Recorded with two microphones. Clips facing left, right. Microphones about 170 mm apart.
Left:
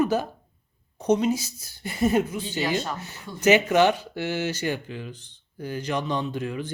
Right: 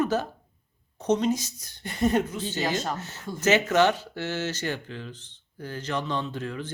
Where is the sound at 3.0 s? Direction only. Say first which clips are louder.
Left 2 dB; 10° left (ahead or behind).